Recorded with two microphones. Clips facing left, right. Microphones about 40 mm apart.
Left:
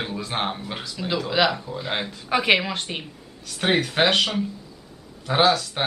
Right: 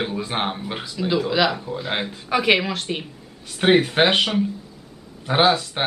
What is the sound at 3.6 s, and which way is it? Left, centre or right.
Speech, centre.